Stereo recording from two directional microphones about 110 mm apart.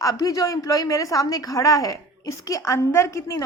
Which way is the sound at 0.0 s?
30° left (ahead or behind).